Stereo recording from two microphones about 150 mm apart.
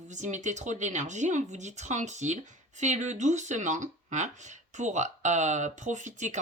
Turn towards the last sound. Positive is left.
turn(degrees=-55)  # may be behind; listen again after turning